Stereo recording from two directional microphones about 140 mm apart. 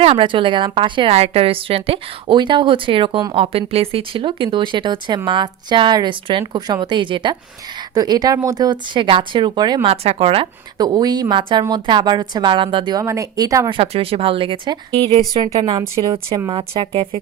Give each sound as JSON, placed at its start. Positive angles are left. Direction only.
{"t": 0.0, "sound": "a woman's voice", "side_deg": -40}
{"t": 9.8, "sound": "speech", "side_deg": -45}
{"t": 10.8, "sound": "a woman's voice", "side_deg": -30}
{"t": 13.7, "sound": "a woman's voice", "side_deg": -45}